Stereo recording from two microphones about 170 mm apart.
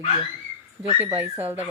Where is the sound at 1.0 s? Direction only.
10° right (ahead or behind).